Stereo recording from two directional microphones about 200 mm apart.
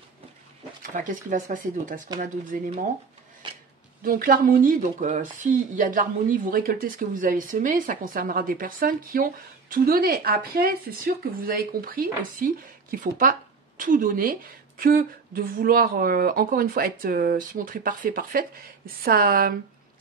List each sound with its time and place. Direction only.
0.9 s speech: 40° right (ahead or behind)
4.0 s speech: 45° right (ahead or behind)